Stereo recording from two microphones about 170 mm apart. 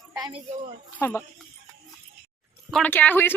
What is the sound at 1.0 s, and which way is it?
Speech, 15° left (ahead or behind).